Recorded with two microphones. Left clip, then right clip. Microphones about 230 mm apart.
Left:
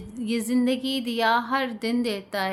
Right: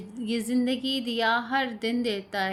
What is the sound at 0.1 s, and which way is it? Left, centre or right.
Speech, left.